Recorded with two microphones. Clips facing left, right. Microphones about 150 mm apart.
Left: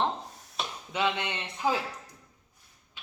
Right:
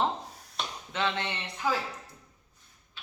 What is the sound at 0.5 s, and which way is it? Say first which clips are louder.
Speech: left 1 dB; 10° left (ahead or behind).